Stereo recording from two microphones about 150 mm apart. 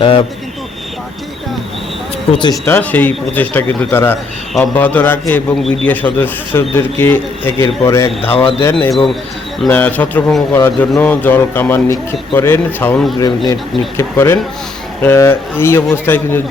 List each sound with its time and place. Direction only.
0.0 s speech: 35° left (ahead or behind)
2.3 s speech: 30° left (ahead or behind)
2.6 s speech: 10° left (ahead or behind)
8.7 s speech: 5° left (ahead or behind)
13.1 s speech: 25° left (ahead or behind)